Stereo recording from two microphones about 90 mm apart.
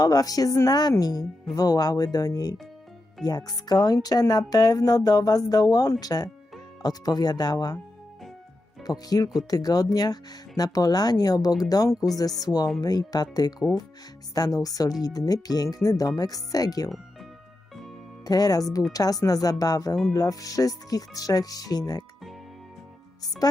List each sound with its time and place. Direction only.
0.0 s speech: 45° left (ahead or behind)
8.8 s speech: 45° left (ahead or behind)
14.3 s speech: 45° left (ahead or behind)
18.3 s speech: 45° left (ahead or behind)
23.4 s speech: 45° left (ahead or behind)